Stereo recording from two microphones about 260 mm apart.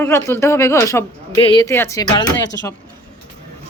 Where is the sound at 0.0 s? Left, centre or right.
Centre.